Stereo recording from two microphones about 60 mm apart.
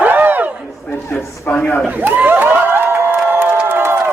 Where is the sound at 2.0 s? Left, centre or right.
Right.